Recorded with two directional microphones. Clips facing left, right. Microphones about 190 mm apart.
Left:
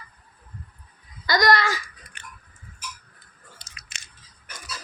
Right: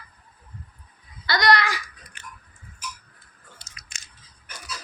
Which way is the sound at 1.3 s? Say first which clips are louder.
Left 1 dB; 45° left (ahead or behind).